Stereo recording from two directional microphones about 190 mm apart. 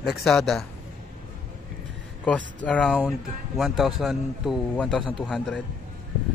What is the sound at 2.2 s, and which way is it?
Speech, 5° left (ahead or behind).